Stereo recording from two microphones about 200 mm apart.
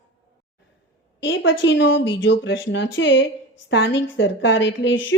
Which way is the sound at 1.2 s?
75° left (ahead or behind).